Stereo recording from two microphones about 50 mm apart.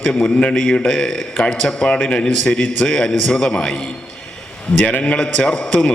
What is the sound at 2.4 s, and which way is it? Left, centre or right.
A man's voice, centre.